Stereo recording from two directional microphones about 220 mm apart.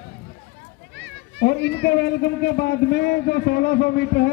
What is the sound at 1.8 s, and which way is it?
Speech, 45° left (ahead or behind).